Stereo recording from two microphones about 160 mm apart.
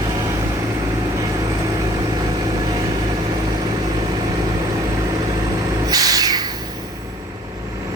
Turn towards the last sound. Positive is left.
turn(degrees=-25)  # may be behind; listen again after turning